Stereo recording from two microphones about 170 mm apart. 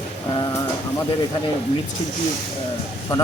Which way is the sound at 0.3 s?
20° left (ahead or behind).